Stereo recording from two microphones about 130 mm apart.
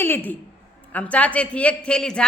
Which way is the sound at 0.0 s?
15° left (ahead or behind).